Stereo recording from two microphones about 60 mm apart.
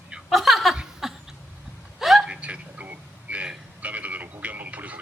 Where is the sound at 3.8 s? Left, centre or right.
Right.